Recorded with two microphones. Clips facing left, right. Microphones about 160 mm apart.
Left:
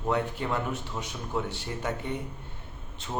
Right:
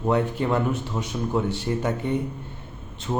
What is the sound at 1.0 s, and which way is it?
Speech, 40° right (ahead or behind).